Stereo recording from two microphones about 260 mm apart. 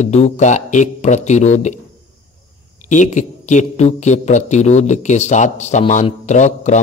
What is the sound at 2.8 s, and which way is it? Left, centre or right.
Speech, left.